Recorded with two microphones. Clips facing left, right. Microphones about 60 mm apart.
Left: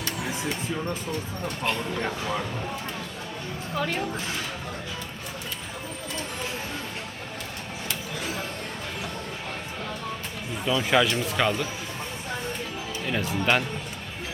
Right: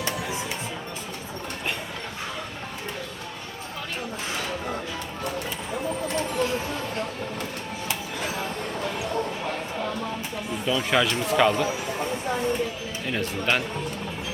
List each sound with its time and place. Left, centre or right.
10.7 s speech: centre
13.1 s speech: centre